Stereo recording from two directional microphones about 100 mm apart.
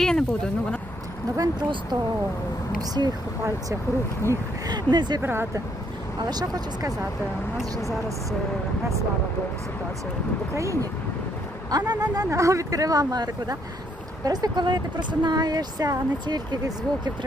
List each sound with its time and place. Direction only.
0.0 s speech: 5° left (ahead or behind)
1.4 s speech: 45° right (ahead or behind)
3.0 s speech: 45° right (ahead or behind)
4.3 s speech: 40° right (ahead or behind)
5.2 s speech: 25° right (ahead or behind)
10.5 s speech: 30° right (ahead or behind)